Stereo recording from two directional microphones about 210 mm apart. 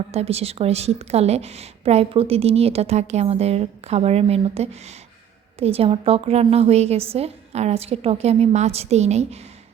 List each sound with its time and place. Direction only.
0.1 s a woman's voice: 30° right (ahead or behind)